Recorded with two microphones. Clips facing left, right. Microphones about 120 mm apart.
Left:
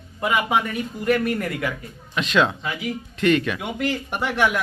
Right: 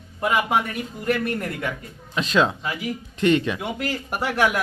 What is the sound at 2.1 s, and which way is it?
Speech, 35° right (ahead or behind).